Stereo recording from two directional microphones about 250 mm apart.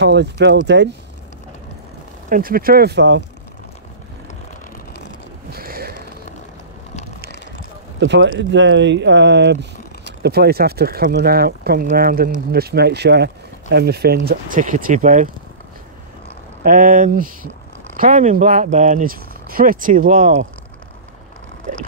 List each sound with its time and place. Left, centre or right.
0.0 s speech: right
2.2 s speech: right
5.5 s a sound: right
8.0 s speech: right
16.6 s speech: right